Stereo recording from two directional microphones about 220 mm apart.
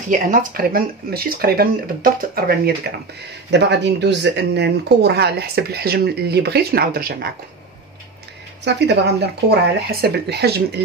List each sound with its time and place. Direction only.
0.1 s speech: 40° right (ahead or behind)
8.6 s speech: 50° right (ahead or behind)